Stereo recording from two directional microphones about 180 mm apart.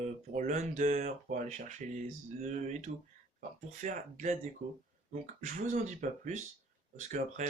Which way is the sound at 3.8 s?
45° right (ahead or behind).